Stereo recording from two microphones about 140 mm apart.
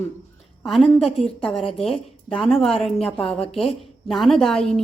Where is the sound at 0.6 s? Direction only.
Centre (ahead or behind).